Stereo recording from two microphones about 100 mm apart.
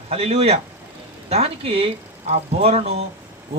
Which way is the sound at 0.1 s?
90° right.